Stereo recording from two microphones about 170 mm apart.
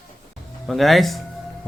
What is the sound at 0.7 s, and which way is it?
Speech, centre (ahead or behind).